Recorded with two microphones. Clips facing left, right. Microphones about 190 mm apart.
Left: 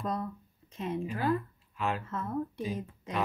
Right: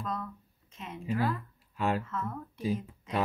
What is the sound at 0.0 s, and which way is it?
Speech, 35° left (ahead or behind).